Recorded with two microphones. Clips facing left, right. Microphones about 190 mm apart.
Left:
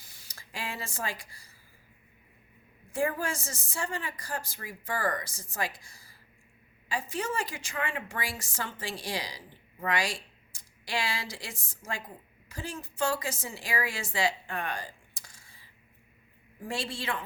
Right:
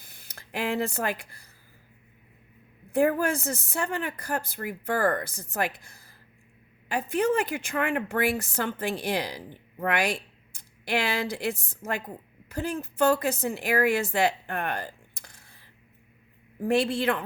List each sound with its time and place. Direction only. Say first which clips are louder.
0.0 s speech: right 4 dB; 60° right (ahead or behind)
2.9 s a woman's voice: right 7 dB; 60° right (ahead or behind)
16.6 s a woman's voice: right 11 dB; 60° right (ahead or behind)